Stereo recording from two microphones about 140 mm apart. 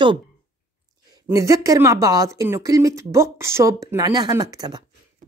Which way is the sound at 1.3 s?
20° right (ahead or behind).